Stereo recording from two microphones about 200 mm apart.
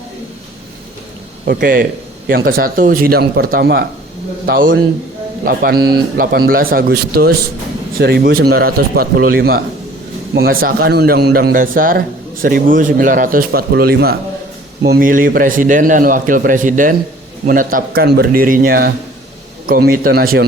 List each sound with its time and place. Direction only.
1.5 s a man's voice: 50° right (ahead or behind)